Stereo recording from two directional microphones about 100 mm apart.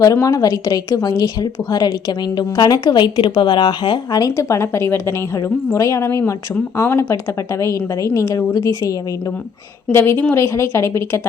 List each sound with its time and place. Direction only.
0.0 s a woman's voice: 35° left (ahead or behind)
4.2 s a woman's voice: 30° left (ahead or behind)